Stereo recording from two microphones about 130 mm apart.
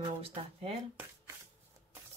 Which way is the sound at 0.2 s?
50° right (ahead or behind).